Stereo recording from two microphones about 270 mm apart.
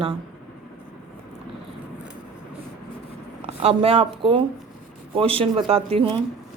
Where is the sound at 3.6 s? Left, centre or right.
Right.